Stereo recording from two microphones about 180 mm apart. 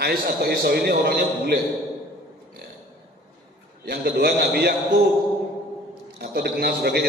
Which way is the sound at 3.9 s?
60° right (ahead or behind).